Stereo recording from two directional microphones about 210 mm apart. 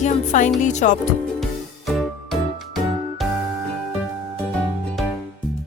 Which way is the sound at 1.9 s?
Centre (ahead or behind).